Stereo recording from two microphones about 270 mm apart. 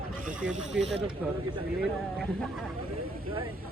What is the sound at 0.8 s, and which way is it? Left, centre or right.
Speech, right.